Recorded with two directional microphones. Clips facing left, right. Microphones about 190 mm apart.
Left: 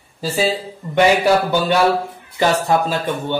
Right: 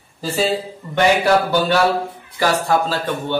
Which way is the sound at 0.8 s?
20° left (ahead or behind).